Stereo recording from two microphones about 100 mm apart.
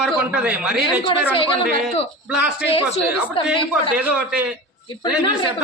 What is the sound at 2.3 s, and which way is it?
Speech, 10° right (ahead or behind).